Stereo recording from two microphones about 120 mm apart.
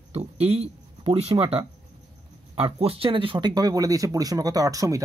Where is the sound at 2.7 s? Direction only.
50° right (ahead or behind).